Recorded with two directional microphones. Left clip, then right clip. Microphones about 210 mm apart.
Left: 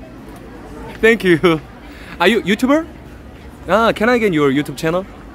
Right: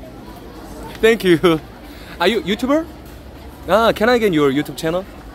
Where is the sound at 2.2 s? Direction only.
20° left (ahead or behind).